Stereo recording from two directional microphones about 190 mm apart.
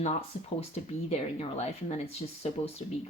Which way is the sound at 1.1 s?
35° left (ahead or behind).